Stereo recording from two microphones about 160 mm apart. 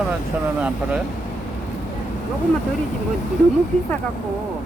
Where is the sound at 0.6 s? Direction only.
5° right (ahead or behind).